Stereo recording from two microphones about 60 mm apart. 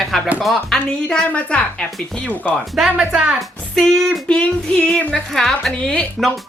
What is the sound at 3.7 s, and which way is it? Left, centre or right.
Speech, centre.